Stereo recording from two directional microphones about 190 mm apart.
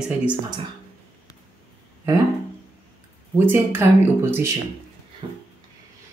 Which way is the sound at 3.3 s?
10° right (ahead or behind).